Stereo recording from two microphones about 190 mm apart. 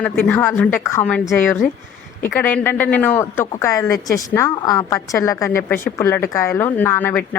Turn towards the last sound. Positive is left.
turn(degrees=10)  # may be behind; listen again after turning